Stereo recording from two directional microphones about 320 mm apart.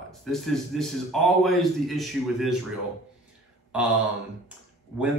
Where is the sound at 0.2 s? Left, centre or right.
Centre.